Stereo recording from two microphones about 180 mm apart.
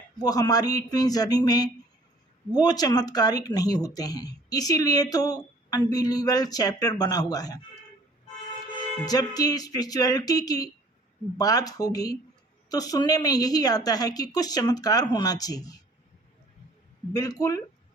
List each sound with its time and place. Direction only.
0.2 s a woman's voice: 20° left (ahead or behind)
9.0 s a woman's voice: 20° left (ahead or behind)
17.1 s a woman's voice: 20° left (ahead or behind)